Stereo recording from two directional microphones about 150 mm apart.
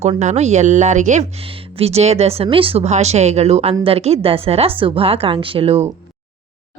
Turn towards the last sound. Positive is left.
turn(degrees=-40)  # may be behind; listen again after turning